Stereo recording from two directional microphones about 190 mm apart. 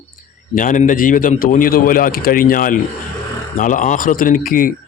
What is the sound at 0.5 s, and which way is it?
Speech, 45° left (ahead or behind).